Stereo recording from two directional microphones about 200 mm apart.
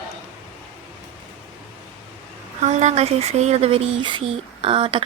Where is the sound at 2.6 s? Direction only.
35° right (ahead or behind).